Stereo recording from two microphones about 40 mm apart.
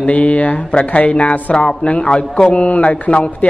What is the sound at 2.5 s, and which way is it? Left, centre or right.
A woman's voice, left.